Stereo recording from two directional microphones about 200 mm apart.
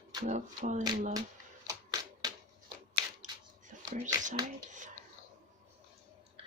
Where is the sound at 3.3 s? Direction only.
20° right (ahead or behind).